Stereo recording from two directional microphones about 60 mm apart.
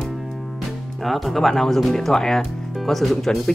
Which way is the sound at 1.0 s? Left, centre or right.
Centre.